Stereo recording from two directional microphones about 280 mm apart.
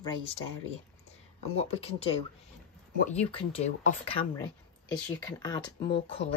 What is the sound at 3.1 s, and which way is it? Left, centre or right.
Speech, centre.